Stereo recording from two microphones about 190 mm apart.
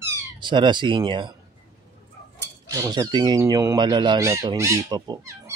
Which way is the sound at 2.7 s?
15° right (ahead or behind).